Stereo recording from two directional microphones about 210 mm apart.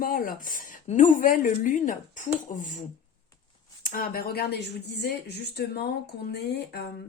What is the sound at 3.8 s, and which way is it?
Speech, 45° left (ahead or behind).